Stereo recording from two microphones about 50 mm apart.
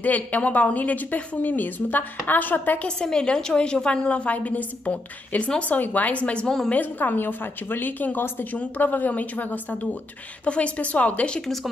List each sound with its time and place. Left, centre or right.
0.0 s a woman's voice: left
3.0 s a woman's voice: centre
6.7 s a woman's voice: left
11.4 s speech: centre